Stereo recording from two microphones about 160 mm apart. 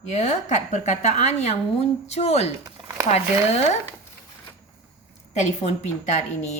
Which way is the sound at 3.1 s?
45° left (ahead or behind).